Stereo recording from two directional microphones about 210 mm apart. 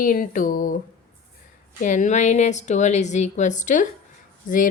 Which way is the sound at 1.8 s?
35° left (ahead or behind).